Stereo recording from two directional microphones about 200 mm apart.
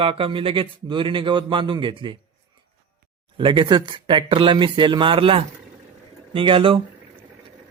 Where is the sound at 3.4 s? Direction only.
25° right (ahead or behind).